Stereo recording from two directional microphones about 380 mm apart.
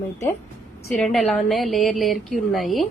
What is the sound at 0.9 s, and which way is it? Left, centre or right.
A woman's voice, centre.